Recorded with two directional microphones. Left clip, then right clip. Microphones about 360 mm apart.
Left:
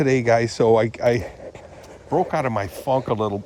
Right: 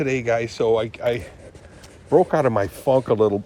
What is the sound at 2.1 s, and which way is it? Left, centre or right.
Speech, centre.